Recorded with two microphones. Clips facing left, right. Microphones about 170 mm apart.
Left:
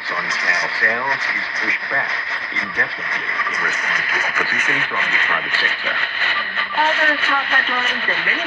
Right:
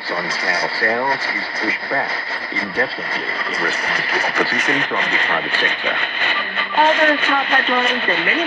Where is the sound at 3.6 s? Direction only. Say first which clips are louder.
Right 4 dB; 35° right (ahead or behind).